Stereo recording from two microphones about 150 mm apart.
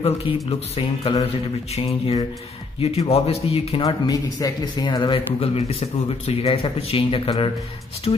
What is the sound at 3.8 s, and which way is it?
Speech, 25° left (ahead or behind).